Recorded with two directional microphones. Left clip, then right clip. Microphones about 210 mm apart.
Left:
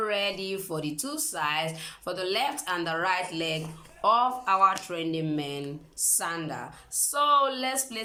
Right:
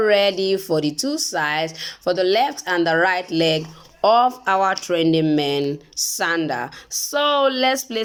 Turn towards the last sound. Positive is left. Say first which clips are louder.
# right 6 dB
turn(degrees=-40)  # may be behind; listen again after turning